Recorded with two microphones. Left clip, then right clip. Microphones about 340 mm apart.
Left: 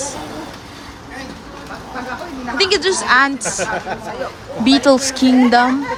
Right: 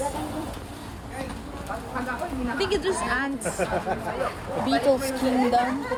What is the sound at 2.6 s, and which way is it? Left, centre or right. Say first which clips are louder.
Speech: left 10 dB; centre.